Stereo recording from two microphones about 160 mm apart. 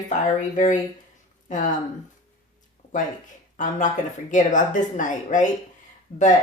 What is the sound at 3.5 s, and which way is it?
Speech, 55° left (ahead or behind).